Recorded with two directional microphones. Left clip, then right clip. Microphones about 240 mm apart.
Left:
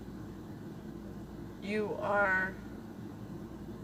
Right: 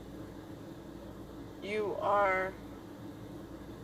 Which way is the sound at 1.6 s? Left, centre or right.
Centre.